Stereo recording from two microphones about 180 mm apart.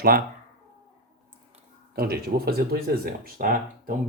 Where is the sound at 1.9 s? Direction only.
60° right (ahead or behind).